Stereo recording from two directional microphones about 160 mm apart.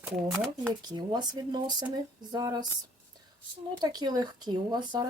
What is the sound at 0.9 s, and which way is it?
Speech, 25° right (ahead or behind).